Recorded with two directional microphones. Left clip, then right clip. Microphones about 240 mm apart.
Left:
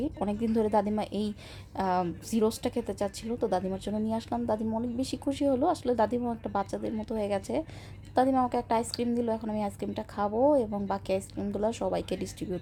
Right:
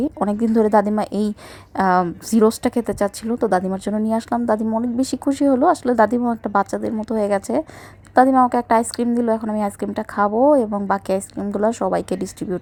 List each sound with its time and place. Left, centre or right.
0.0 s a woman's voice: right